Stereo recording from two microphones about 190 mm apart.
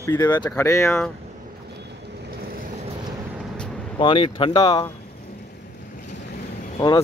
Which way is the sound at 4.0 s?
25° left (ahead or behind).